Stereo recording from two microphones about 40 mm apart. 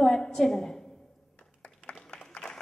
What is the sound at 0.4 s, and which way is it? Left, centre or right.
Speech, centre.